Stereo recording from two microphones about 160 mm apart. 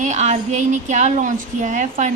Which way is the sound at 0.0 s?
45° right (ahead or behind).